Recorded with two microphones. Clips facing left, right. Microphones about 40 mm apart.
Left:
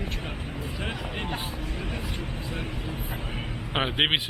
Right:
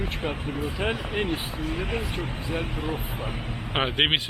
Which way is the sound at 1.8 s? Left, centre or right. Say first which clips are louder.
Right 5 dB; right.